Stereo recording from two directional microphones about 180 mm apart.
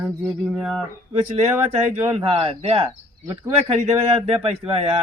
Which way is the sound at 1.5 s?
15° right (ahead or behind).